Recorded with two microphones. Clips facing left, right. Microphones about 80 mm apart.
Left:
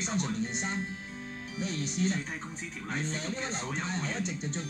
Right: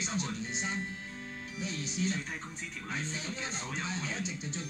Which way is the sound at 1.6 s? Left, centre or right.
Left.